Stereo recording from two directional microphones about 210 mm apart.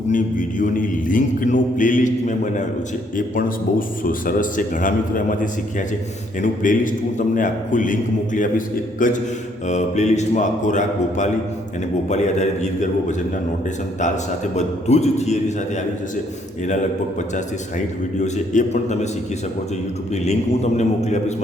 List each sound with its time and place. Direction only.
0.1 s a man's voice: 40° left (ahead or behind)
14.5 s a man's voice: 30° left (ahead or behind)
17.3 s a man's voice: 35° left (ahead or behind)
20.2 s a man's voice: 30° left (ahead or behind)